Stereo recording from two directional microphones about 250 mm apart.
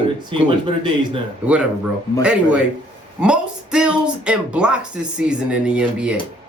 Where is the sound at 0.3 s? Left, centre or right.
Centre.